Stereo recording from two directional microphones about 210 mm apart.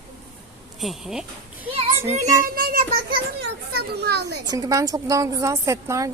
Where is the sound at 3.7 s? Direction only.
50° right (ahead or behind).